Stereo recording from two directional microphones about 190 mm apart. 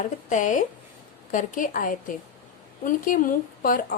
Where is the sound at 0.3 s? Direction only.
45° left (ahead or behind).